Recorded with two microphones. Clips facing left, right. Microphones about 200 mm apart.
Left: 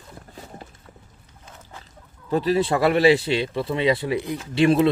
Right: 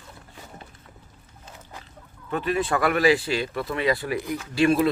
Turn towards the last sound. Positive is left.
turn(degrees=20)  # may be behind; listen again after turning